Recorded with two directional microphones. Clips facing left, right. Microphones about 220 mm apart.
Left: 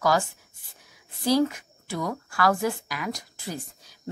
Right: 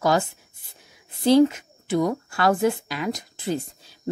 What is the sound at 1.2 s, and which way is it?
Speech, 20° right (ahead or behind).